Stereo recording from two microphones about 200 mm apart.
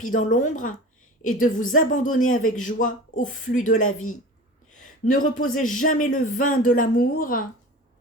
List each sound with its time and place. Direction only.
0.1 s speech: 40° left (ahead or behind)
5.0 s speech: 40° left (ahead or behind)